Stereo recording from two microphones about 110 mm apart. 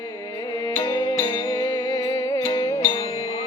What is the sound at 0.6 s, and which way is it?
Music, 40° left (ahead or behind).